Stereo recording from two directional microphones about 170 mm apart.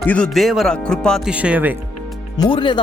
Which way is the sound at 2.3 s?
25° left (ahead or behind).